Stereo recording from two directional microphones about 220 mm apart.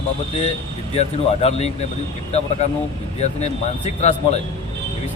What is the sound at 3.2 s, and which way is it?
Speech, 30° left (ahead or behind).